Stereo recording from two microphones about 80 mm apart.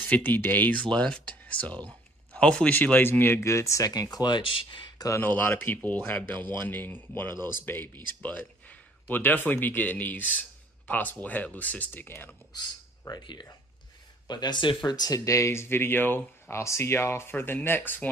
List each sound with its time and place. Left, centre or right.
0.1 s speech: left
0.8 s speech: centre; by 4.7 s left
4.9 s a sound: left
5.2 s speech: left
13.2 s speech: left